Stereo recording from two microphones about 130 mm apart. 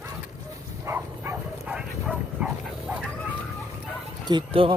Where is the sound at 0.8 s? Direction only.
15° right (ahead or behind).